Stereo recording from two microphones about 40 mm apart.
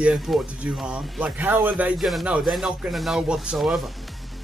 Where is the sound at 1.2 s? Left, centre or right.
Right.